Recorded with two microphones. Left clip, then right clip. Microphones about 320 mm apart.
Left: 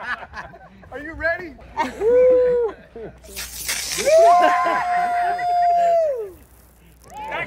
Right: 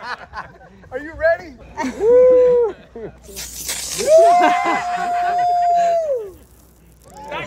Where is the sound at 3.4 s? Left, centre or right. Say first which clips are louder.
Left 1 dB; left.